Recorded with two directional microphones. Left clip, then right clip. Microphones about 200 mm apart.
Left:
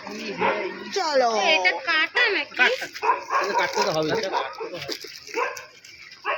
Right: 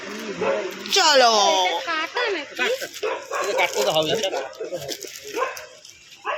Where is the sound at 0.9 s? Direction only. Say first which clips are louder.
Right 6 dB; 5° right (ahead or behind).